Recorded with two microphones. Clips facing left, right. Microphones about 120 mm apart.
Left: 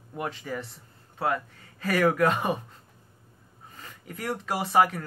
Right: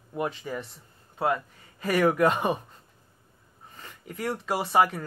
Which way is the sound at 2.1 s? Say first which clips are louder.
Right 1 dB; 20° right (ahead or behind).